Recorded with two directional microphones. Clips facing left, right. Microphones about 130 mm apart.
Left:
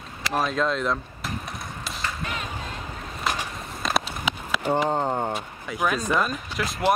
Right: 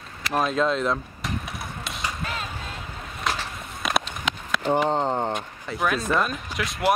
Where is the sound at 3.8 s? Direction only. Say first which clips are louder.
Even; 5° left (ahead or behind).